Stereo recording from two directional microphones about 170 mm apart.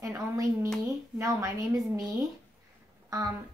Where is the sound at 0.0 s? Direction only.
15° right (ahead or behind).